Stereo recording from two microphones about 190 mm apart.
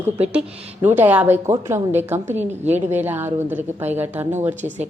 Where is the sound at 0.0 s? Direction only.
10° right (ahead or behind).